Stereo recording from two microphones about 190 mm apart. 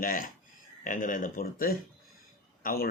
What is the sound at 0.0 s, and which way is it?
A man's voice, 45° left (ahead or behind).